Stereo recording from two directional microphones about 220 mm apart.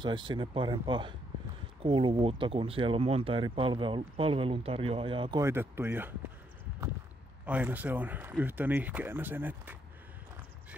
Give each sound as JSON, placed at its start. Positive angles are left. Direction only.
{"t": 0.0, "sound": "speech", "side_deg": -20}
{"t": 5.4, "sound": "speech", "side_deg": -10}
{"t": 7.4, "sound": "speech", "side_deg": -5}